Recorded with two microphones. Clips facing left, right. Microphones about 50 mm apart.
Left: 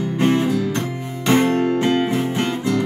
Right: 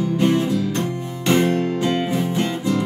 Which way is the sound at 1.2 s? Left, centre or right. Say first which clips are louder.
Left 2 dB; left.